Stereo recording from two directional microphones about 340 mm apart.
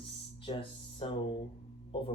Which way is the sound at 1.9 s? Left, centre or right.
Centre.